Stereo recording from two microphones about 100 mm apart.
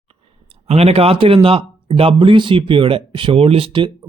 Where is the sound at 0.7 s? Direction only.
90° right.